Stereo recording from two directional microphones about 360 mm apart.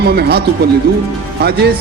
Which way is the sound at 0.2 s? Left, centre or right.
Right.